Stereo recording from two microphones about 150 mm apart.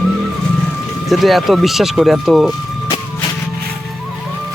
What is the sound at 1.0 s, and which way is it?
Speech, centre (ahead or behind).